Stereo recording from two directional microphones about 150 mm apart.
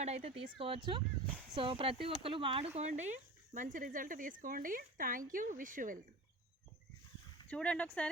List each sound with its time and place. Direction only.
0.0 s speech: 45° right (ahead or behind); by 6.0 s 65° right (ahead or behind)
7.4 s speech: 10° left (ahead or behind)